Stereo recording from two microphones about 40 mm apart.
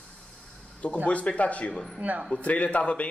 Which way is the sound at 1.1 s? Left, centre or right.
Left.